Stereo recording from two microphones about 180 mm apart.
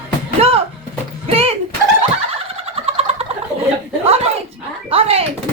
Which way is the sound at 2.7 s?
35° right (ahead or behind).